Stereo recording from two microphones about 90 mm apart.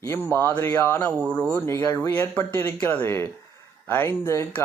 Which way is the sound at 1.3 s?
15° left (ahead or behind).